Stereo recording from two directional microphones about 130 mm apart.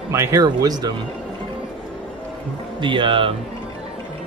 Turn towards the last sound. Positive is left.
turn(degrees=-40)  # may be behind; listen again after turning